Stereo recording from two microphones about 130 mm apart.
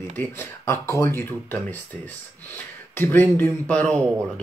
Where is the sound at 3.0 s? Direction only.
15° left (ahead or behind).